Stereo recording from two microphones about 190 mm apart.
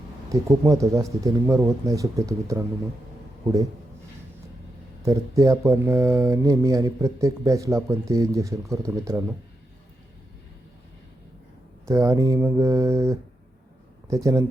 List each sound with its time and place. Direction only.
0.3 s speech: 15° right (ahead or behind)
5.0 s speech: 15° right (ahead or behind)
11.9 s speech: 15° right (ahead or behind)